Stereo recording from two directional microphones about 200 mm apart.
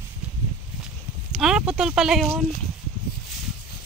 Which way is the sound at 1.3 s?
5° right (ahead or behind).